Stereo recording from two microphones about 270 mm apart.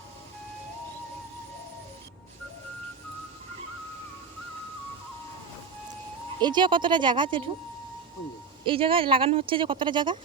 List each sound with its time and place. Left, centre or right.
6.4 s speech: centre
8.6 s speech: centre